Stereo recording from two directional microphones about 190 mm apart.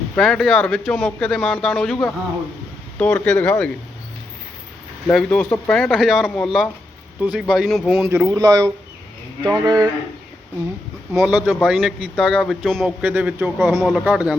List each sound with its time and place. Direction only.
0.2 s a man's voice: 5° left (ahead or behind)
5.1 s a man's voice: 5° left (ahead or behind)
9.4 s speech: 20° right (ahead or behind)
11.1 s a man's voice: 5° right (ahead or behind)